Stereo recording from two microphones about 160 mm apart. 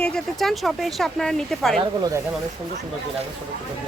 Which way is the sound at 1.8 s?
20° right (ahead or behind).